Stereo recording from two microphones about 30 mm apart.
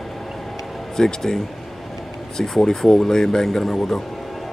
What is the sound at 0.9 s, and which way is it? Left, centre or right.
A man's voice, centre.